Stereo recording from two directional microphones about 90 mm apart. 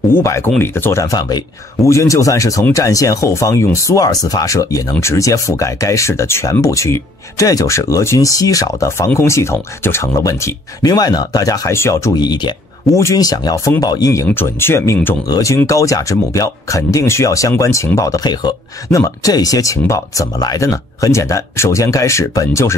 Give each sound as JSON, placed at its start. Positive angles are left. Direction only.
{"t": 0.1, "sound": "speech", "side_deg": 30}
{"t": 1.0, "sound": "speech", "side_deg": 45}
{"t": 10.9, "sound": "speech", "side_deg": 45}
{"t": 11.7, "sound": "speech", "side_deg": 30}
{"t": 12.1, "sound": "speech", "side_deg": 50}
{"t": 12.9, "sound": "speech", "side_deg": 40}
{"t": 14.2, "sound": "speech", "side_deg": 25}
{"t": 15.2, "sound": "speech", "side_deg": 40}